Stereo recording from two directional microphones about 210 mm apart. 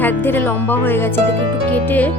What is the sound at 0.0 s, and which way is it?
Speech, 10° left (ahead or behind).